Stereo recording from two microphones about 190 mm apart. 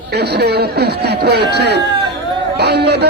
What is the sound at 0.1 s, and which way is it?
Speech, 60° right (ahead or behind).